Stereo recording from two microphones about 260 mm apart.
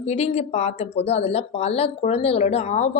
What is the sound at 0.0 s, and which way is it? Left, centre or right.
A woman's voice, left.